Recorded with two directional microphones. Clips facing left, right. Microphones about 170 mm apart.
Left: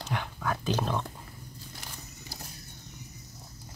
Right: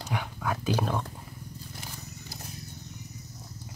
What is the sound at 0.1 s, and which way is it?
Dog, 10° right (ahead or behind).